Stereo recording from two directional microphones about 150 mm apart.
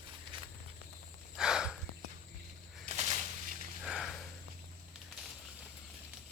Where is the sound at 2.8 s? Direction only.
50° right (ahead or behind).